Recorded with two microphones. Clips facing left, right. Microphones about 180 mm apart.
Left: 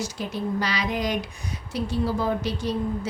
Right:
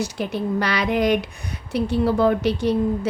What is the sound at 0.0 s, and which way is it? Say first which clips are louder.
A woman's voice: right 4 dB; 65° right (ahead or behind).